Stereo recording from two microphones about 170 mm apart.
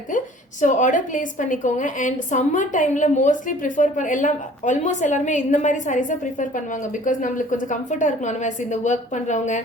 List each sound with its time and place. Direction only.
0.6 s a woman's voice: 50° left (ahead or behind)